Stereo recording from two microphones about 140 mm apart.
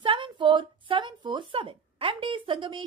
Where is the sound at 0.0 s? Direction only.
35° right (ahead or behind).